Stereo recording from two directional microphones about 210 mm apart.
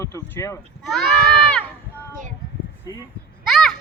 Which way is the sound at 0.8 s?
Centre (ahead or behind).